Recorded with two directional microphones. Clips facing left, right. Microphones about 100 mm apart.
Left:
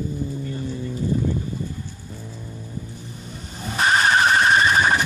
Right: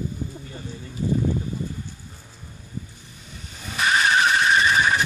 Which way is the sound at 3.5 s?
35° left (ahead or behind).